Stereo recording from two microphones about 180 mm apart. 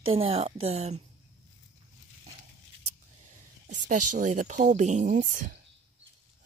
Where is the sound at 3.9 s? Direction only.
45° right (ahead or behind).